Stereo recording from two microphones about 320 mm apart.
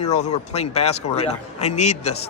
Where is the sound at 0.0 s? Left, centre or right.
Left.